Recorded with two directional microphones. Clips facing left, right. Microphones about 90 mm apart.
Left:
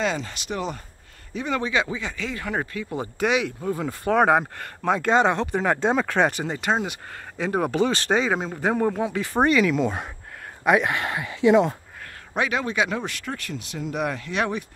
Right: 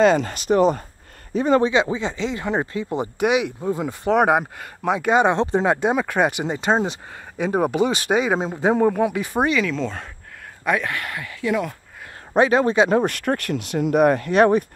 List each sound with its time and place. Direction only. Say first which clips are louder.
0.0 s a man's voice: right 10 dB; 50° right (ahead or behind)
1.7 s speech: right 5 dB; 25° right (ahead or behind)
5.3 s speech: right 4 dB; 25° right (ahead or behind)
5.8 s speech: right 1 dB; 10° right (ahead or behind); by 7.0 s 30° right (ahead or behind)
7.3 s speech: right 3 dB; 20° right (ahead or behind)
9.4 s speech: left 2 dB; centre (ahead or behind); by 11.7 s 25° left (ahead or behind)
12.4 s a man's voice: right 8 dB; 35° right (ahead or behind)
13.0 s speech: right 10 dB; 55° right (ahead or behind)